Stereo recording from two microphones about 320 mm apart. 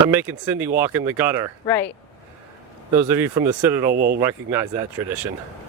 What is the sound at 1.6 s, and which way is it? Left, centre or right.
Speech, centre.